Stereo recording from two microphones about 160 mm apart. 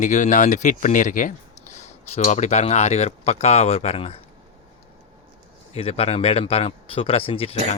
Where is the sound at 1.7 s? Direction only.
45° left (ahead or behind).